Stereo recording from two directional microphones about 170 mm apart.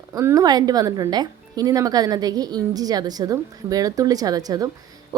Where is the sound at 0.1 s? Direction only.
20° right (ahead or behind).